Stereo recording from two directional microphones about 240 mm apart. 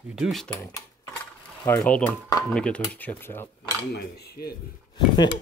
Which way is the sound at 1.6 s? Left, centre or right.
Centre.